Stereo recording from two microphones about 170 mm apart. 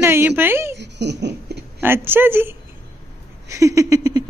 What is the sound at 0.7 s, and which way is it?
Laughter, 90° right.